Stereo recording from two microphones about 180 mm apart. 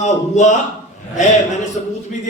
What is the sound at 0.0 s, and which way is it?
Speech, 40° left (ahead or behind).